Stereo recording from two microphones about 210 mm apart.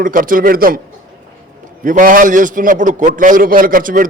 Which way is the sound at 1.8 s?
40° right (ahead or behind).